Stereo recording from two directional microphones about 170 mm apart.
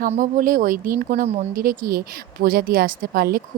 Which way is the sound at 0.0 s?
55° right (ahead or behind).